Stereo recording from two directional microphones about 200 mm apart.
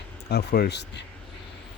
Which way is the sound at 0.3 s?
50° left (ahead or behind).